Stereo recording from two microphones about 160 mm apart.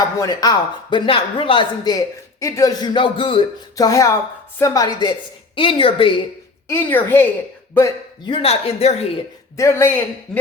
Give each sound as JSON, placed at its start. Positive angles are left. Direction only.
{"t": 0.2, "sound": "speech", "side_deg": 25}
{"t": 3.8, "sound": "a woman's voice", "side_deg": 20}
{"t": 6.7, "sound": "a woman's voice", "side_deg": 15}
{"t": 8.3, "sound": "a woman's voice", "side_deg": 40}
{"t": 9.6, "sound": "a woman's voice", "side_deg": 15}
{"t": 10.3, "sound": "a sound", "side_deg": 5}